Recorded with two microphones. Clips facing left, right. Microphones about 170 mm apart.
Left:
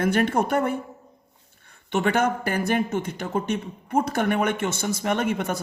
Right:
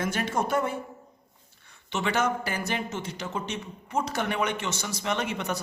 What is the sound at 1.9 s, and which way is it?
A man's voice, 55° left (ahead or behind).